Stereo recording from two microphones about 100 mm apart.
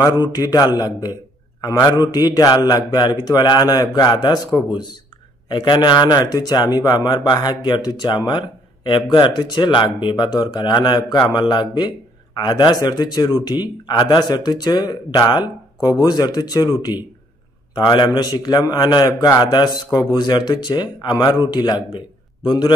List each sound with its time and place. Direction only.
0.2 s a man's voice: 40° left (ahead or behind)
5.5 s a man's voice: 45° left (ahead or behind)